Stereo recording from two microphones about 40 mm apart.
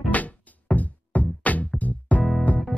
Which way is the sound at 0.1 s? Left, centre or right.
Left.